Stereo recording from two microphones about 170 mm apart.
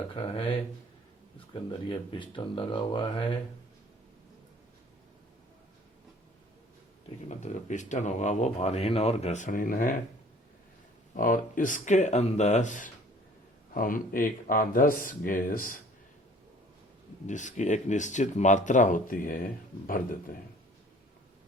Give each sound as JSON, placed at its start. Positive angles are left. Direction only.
{"t": 0.1, "sound": "speech", "side_deg": 30}
{"t": 1.5, "sound": "speech", "side_deg": 30}
{"t": 7.3, "sound": "speech", "side_deg": 45}
{"t": 11.1, "sound": "speech", "side_deg": 50}
{"t": 17.2, "sound": "speech", "side_deg": 45}